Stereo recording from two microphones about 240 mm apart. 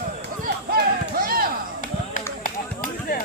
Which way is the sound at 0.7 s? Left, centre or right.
Right.